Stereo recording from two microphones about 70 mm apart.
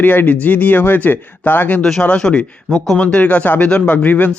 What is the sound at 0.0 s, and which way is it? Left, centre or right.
Speech, left.